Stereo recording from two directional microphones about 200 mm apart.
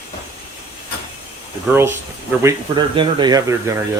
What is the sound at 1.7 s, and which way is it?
Speech, 10° right (ahead or behind).